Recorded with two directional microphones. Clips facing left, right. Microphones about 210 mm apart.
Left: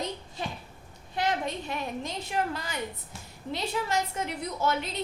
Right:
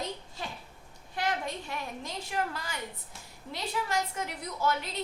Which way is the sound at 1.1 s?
20° left (ahead or behind).